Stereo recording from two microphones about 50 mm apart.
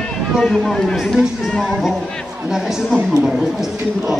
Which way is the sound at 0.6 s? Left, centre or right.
Centre.